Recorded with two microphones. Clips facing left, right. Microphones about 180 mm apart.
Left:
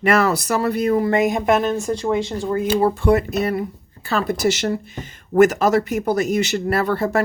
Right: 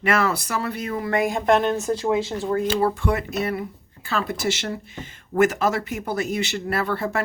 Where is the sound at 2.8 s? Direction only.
25° left (ahead or behind).